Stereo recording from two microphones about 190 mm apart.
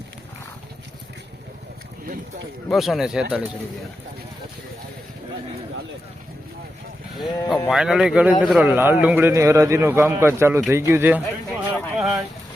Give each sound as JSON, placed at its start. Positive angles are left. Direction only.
{"t": 2.6, "sound": "speech", "side_deg": 0}
{"t": 7.3, "sound": "speech", "side_deg": 20}
{"t": 7.7, "sound": "a man's voice", "side_deg": 0}
{"t": 11.4, "sound": "a sound", "side_deg": 10}